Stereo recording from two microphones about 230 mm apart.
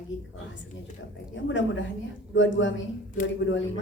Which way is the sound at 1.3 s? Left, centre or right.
Left.